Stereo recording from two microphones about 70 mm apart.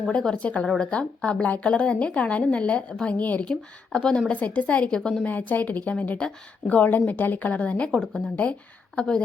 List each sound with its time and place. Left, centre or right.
0.1 s a woman's voice: centre
5.2 s a woman's voice: left
9.0 s a woman's voice: centre